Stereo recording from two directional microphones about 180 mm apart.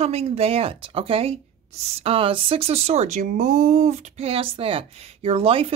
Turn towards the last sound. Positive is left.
turn(degrees=-35)  # may be behind; listen again after turning